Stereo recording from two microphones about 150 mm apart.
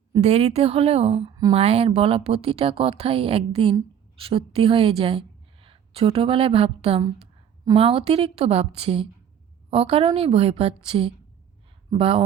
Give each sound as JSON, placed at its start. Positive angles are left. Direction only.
{"t": 0.2, "sound": "a woman's voice", "side_deg": -45}